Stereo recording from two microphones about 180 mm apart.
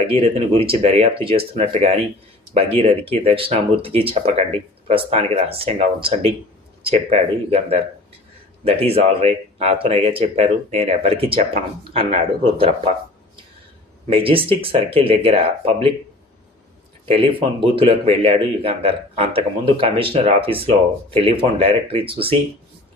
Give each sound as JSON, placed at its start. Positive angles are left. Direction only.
{"t": 0.2, "sound": "a man's voice", "side_deg": -35}
{"t": 14.1, "sound": "a man's voice", "side_deg": -30}
{"t": 17.7, "sound": "a man's voice", "side_deg": -30}